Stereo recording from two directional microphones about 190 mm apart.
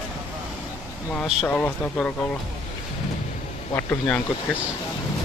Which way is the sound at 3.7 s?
5° left (ahead or behind).